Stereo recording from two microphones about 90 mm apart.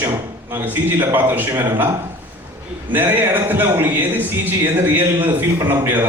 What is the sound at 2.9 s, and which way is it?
A man's voice, 20° right (ahead or behind).